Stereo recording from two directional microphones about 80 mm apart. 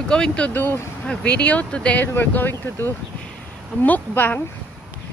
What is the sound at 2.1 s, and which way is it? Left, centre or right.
Speech, left.